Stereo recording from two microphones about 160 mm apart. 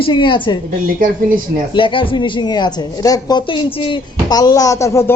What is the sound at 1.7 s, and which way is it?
A woman's voice, 30° left (ahead or behind).